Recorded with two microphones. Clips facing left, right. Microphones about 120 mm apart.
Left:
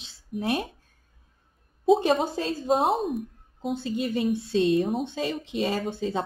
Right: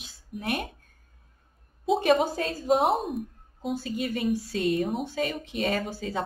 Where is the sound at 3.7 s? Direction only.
25° left (ahead or behind).